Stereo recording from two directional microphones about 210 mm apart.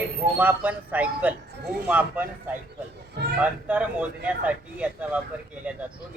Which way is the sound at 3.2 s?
55° right (ahead or behind).